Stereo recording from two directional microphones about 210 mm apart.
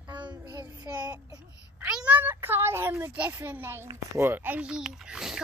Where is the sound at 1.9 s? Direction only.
5° right (ahead or behind).